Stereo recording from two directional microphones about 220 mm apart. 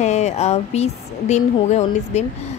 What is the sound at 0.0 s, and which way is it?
A woman's voice, 30° left (ahead or behind).